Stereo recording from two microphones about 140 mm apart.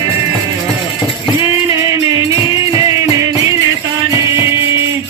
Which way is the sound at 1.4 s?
25° right (ahead or behind).